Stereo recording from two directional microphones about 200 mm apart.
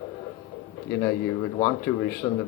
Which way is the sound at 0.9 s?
10° left (ahead or behind).